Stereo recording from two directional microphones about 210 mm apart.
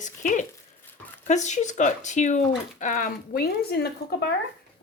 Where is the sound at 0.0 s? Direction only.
35° left (ahead or behind).